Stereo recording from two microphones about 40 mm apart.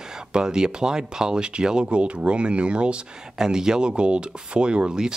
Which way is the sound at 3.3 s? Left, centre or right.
Centre.